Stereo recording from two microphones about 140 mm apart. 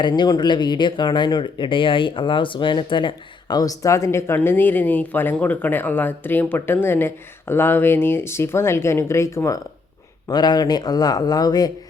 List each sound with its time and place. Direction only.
0.0 s speech: 30° left (ahead or behind)